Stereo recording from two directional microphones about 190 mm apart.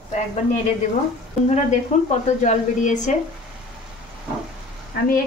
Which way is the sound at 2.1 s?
40° left (ahead or behind).